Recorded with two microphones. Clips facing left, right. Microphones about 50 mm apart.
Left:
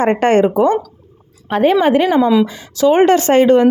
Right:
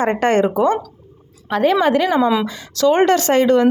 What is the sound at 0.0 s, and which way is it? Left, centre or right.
Speech, left.